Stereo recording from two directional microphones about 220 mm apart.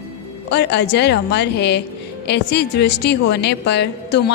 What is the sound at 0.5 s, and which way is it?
Speech, 50° left (ahead or behind).